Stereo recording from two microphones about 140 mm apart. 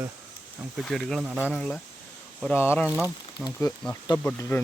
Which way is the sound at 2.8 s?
10° right (ahead or behind).